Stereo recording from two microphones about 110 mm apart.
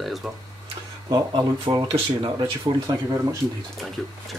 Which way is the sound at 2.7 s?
35° right (ahead or behind).